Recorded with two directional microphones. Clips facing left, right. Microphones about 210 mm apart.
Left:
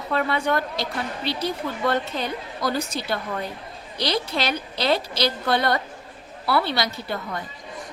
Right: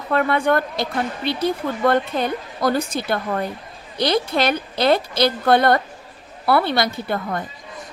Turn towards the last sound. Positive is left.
turn(degrees=-50)  # may be behind; listen again after turning